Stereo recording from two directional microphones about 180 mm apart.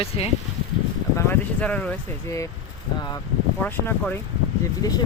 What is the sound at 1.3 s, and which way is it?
Speech, 5° left (ahead or behind).